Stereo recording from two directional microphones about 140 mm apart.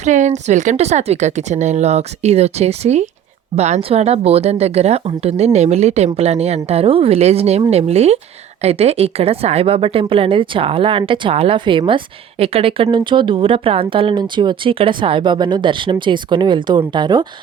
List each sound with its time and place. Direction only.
0.0 s a woman's voice: 60° right (ahead or behind); by 17.2 s 30° right (ahead or behind)